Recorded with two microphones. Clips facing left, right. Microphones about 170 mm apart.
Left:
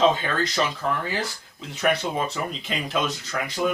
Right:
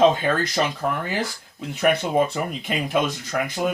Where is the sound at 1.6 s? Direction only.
55° right (ahead or behind).